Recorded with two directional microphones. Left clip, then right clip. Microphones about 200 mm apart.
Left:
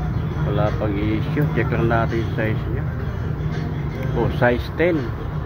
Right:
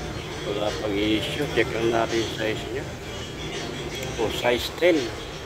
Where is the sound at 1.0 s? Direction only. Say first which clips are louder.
Even; 20° right (ahead or behind).